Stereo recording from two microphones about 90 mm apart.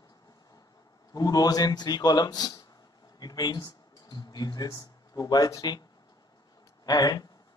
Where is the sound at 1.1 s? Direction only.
45° left (ahead or behind).